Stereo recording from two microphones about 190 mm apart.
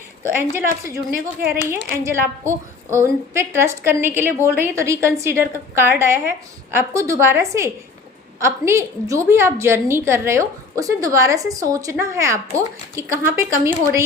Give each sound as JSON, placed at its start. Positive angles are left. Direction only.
{"t": 0.5, "sound": "a woman's voice", "side_deg": -15}
{"t": 1.4, "sound": "speech", "side_deg": -50}
{"t": 2.0, "sound": "a woman's voice", "side_deg": -15}